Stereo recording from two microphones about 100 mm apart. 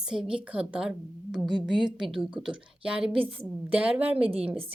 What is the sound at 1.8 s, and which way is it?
Speech, 50° right (ahead or behind).